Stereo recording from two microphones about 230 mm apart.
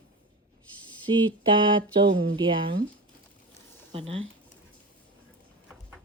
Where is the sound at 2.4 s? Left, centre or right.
Right.